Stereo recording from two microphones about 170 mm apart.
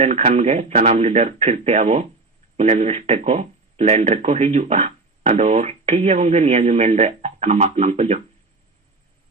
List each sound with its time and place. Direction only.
0.0 s speech: 40° right (ahead or behind)